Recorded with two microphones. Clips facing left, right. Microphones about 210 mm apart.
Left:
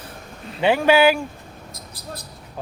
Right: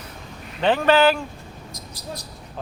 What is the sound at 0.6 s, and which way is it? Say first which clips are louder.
Speech: left 1 dB; 10° left (ahead or behind).